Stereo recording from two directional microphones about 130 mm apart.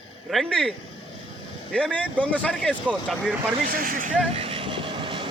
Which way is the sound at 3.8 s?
85° right.